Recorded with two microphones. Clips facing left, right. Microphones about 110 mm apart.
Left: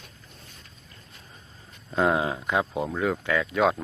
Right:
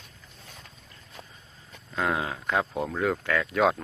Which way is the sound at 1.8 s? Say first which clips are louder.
Left 5 dB; 25° left (ahead or behind).